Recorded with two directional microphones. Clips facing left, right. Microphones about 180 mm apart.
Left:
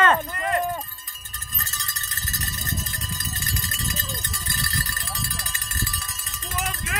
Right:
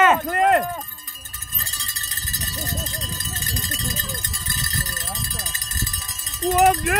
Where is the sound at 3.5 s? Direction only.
35° right (ahead or behind).